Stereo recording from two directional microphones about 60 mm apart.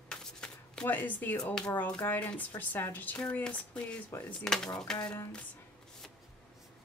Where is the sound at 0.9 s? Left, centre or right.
Left.